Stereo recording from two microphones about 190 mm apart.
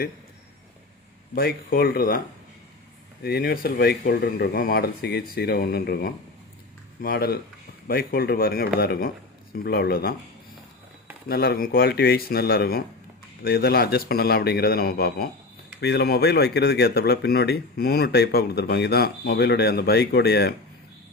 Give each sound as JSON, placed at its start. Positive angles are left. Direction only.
{"t": 1.4, "sound": "a man's voice", "side_deg": 50}
{"t": 3.2, "sound": "a man's voice", "side_deg": 55}
{"t": 11.3, "sound": "a man's voice", "side_deg": 55}